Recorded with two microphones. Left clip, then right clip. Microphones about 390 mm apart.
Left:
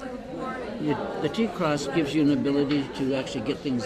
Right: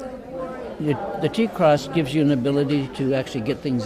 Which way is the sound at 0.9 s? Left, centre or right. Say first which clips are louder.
Right 4 dB; right.